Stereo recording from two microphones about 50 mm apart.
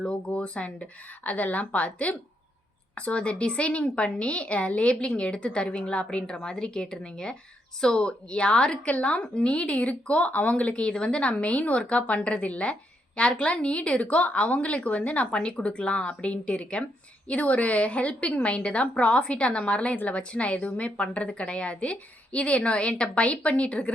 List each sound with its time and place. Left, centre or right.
0.0 s a woman's voice: centre